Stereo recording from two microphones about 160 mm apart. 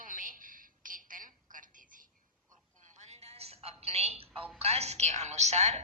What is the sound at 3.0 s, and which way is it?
Music, 45° right (ahead or behind).